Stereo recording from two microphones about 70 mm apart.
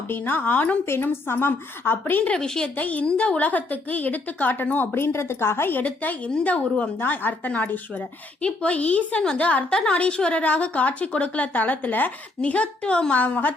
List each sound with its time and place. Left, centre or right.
0.1 s a woman's voice: left
0.9 s a woman's voice: left
2.3 s a woman's voice: centre; by 5.8 s left
5.8 s a woman's voice: left